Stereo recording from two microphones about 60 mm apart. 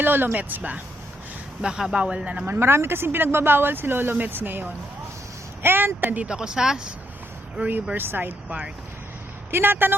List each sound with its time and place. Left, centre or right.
0.0 s speech: right
1.6 s speech: centre
2.5 s speech: right
6.2 s speech: centre
7.9 s speech: right
8.4 s speech: right
9.5 s speech: right